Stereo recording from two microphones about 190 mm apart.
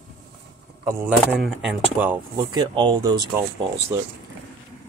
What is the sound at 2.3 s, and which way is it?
Speech, 25° right (ahead or behind).